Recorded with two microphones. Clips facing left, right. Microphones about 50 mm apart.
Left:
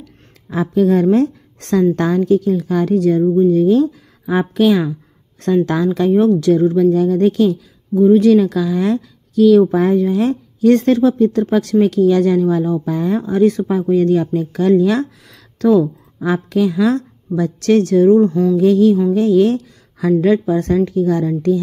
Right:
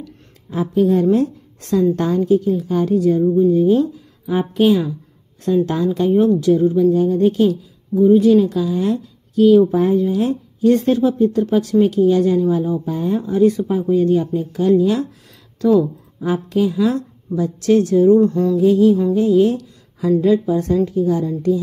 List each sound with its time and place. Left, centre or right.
0.5 s a woman's voice: left
12.4 s speech: left
16.2 s speech: left
18.2 s mantra: left
18.6 s a woman's voice: left